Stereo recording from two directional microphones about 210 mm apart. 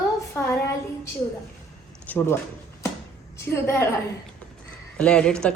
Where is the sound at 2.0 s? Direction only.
10° left (ahead or behind).